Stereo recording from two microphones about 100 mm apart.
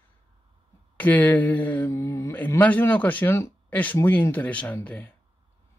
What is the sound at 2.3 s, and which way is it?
Speech, 15° left (ahead or behind).